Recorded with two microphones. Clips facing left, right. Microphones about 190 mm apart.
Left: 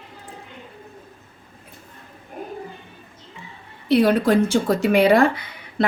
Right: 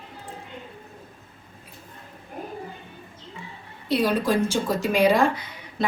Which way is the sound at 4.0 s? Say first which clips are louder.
Left 5 dB; 60° left (ahead or behind).